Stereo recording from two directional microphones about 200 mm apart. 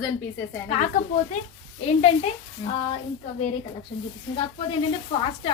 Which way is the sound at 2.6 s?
20° left (ahead or behind).